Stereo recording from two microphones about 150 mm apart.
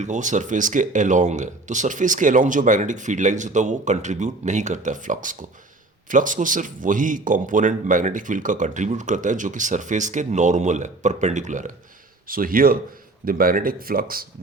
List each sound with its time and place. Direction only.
0.0 s a man's voice: 55° right (ahead or behind)
12.3 s speech: 70° right (ahead or behind)